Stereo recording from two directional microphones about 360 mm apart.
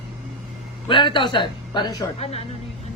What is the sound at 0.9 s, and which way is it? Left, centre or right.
Speech, centre.